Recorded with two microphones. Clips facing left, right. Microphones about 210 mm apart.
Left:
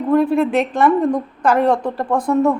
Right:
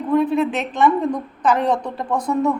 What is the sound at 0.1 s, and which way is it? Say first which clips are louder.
Speech: left 3 dB; 60° left (ahead or behind).